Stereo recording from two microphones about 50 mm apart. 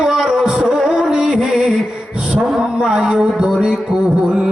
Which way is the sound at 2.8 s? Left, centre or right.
Centre.